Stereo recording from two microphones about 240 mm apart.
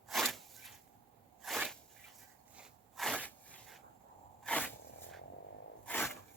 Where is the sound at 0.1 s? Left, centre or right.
Centre.